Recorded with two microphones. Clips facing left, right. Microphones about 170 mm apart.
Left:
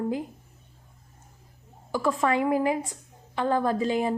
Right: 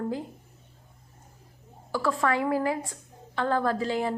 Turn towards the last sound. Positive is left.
turn(degrees=15)  # may be behind; listen again after turning